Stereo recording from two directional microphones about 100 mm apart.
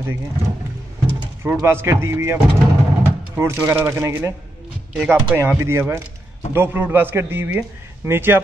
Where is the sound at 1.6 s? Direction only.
25° right (ahead or behind).